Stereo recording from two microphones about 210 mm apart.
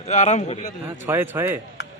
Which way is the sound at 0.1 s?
35° left (ahead or behind).